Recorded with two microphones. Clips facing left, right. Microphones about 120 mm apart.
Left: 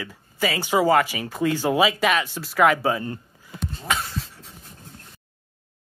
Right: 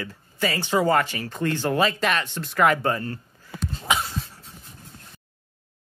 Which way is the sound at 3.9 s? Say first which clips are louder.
Right 2 dB; 15° right (ahead or behind).